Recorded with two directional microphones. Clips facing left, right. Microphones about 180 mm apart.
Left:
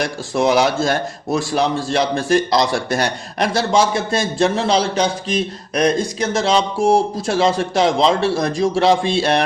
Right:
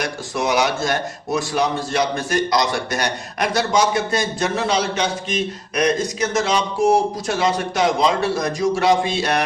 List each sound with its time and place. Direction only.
0.3 s a man's voice: 30° left (ahead or behind)